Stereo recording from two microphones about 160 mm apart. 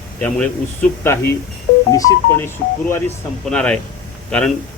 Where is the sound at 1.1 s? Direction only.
15° left (ahead or behind).